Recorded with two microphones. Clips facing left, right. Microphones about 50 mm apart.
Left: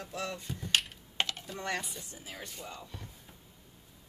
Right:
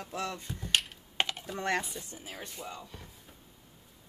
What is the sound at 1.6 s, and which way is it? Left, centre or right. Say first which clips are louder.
Speech: right 5 dB; right.